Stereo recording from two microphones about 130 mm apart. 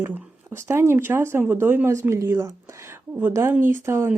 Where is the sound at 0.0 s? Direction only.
20° right (ahead or behind).